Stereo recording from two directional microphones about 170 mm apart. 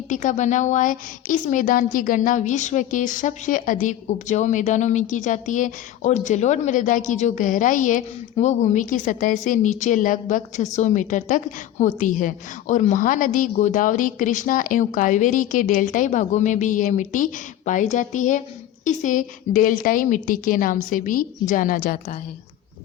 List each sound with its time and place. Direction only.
0.1 s a woman's voice: 45° left (ahead or behind)